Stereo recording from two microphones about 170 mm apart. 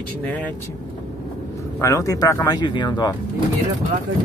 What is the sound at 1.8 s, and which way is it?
Speech, 20° left (ahead or behind).